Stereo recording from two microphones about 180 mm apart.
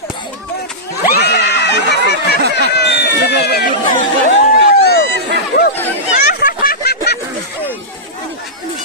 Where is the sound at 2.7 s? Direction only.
70° left (ahead or behind).